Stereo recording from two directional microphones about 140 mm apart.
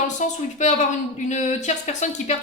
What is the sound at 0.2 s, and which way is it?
Speech, 60° left (ahead or behind).